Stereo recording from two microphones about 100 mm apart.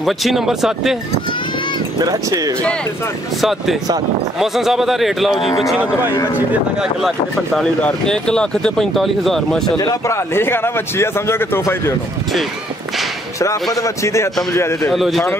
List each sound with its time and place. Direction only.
0.0 s speech: centre (ahead or behind)
2.0 s speech: 40° right (ahead or behind)
3.3 s speech: centre (ahead or behind)
6.3 s speech: 15° right (ahead or behind)
7.0 s speech: centre (ahead or behind)
9.8 s speech: 40° left (ahead or behind)
10.1 s a man's voice: 25° left (ahead or behind)
13.7 s a man's voice: 30° left (ahead or behind)
14.9 s speech: centre (ahead or behind)